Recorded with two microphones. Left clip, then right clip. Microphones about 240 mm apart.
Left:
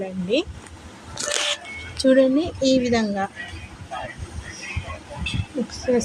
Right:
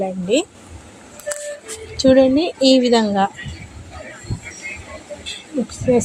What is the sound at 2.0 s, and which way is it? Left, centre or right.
A woman's voice, centre.